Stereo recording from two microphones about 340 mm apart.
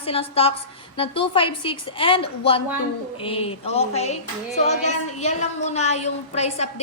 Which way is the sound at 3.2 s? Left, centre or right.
Centre.